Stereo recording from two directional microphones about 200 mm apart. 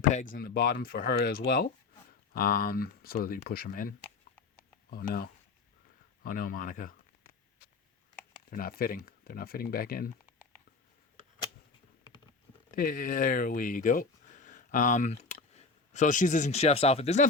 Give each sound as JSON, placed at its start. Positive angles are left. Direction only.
{"t": 0.0, "sound": "speech", "side_deg": 40}
{"t": 8.4, "sound": "speech", "side_deg": 45}
{"t": 12.7, "sound": "speech", "side_deg": 45}